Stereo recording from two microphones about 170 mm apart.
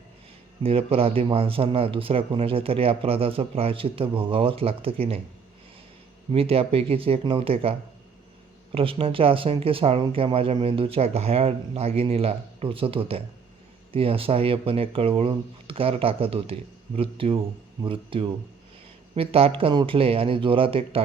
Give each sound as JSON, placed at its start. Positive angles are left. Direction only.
{"t": 0.6, "sound": "speech", "side_deg": -35}
{"t": 6.3, "sound": "speech", "side_deg": -35}